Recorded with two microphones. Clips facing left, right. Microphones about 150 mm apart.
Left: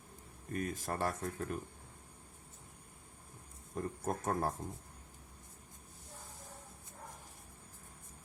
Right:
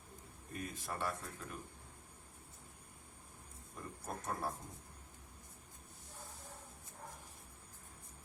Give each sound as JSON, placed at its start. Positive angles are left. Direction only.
{"t": 0.5, "sound": "speech", "side_deg": 45}
{"t": 3.8, "sound": "speech", "side_deg": 45}